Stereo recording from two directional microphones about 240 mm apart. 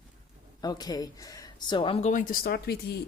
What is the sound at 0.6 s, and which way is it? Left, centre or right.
Speech, centre.